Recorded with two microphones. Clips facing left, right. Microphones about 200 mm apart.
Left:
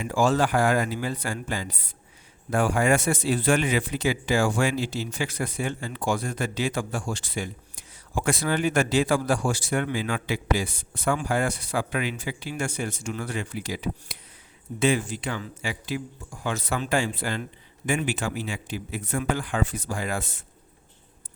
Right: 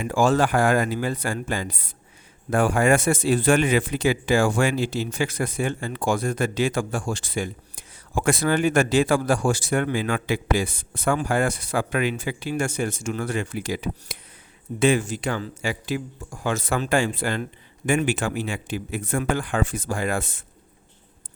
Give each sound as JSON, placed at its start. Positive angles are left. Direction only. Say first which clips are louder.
{"t": 0.0, "sound": "a man's voice", "louder": "right 2 dB", "side_deg": -55}